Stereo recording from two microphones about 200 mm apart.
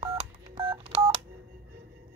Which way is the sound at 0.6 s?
25° right (ahead or behind).